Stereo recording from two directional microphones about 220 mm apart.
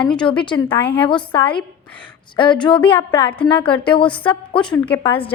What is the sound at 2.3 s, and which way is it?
Speech, 20° left (ahead or behind).